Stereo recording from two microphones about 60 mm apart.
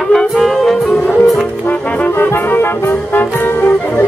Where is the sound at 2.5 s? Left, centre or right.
Left.